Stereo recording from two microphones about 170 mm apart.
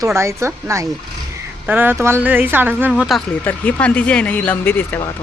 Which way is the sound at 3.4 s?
10° left (ahead or behind).